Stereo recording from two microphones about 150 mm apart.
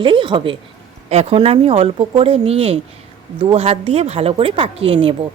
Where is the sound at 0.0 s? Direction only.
35° right (ahead or behind).